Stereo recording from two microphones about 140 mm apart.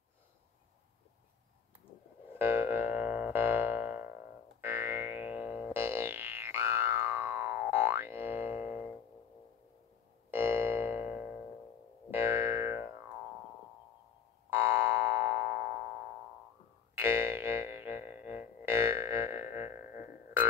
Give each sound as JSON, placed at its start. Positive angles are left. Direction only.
{"t": 2.3, "sound": "music", "side_deg": -15}
{"t": 10.3, "sound": "keyboard", "side_deg": -15}
{"t": 12.1, "sound": "music", "side_deg": -15}
{"t": 14.5, "sound": "keyboard", "side_deg": -15}
{"t": 16.9, "sound": "music", "side_deg": -15}